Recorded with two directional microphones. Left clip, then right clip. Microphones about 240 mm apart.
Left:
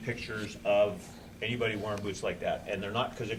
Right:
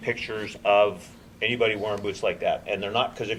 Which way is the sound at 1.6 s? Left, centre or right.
Centre.